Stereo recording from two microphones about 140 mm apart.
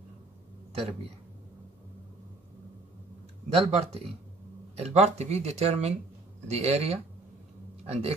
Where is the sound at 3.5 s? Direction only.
45° right (ahead or behind).